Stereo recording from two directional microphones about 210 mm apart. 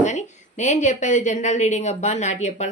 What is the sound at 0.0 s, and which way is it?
A woman's voice, 35° left (ahead or behind).